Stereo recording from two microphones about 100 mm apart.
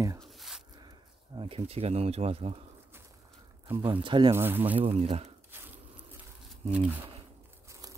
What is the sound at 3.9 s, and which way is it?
Speech, 50° right (ahead or behind).